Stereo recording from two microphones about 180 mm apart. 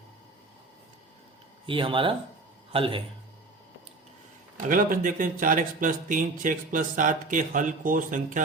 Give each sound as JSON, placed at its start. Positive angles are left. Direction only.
{"t": 1.6, "sound": "speech", "side_deg": -30}
{"t": 4.5, "sound": "speech", "side_deg": -50}